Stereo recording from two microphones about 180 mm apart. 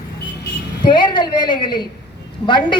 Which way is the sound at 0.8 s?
25° left (ahead or behind).